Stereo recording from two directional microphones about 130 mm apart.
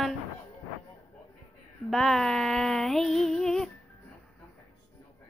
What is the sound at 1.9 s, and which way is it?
A woman's voice, centre (ahead or behind).